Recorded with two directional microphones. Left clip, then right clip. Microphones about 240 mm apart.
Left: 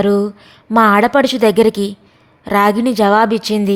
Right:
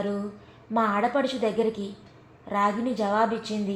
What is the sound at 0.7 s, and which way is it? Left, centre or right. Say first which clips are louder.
A woman's voice: left 14 dB; left.